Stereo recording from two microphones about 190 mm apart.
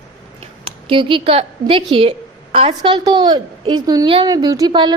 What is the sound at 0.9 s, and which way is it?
A woman's voice, 25° right (ahead or behind).